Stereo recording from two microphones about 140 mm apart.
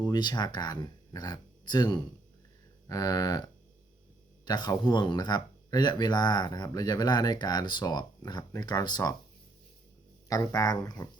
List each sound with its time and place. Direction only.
0.0 s speech: 30° left (ahead or behind)
4.4 s speech: 30° left (ahead or behind)
10.2 s speech: 25° left (ahead or behind)